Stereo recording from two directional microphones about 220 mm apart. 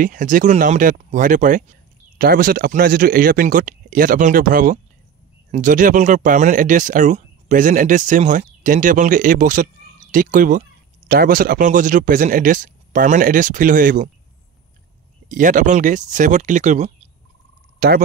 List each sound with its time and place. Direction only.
0.0 s speech: 35° right (ahead or behind)
15.2 s speech: 35° right (ahead or behind)
17.7 s speech: 45° right (ahead or behind)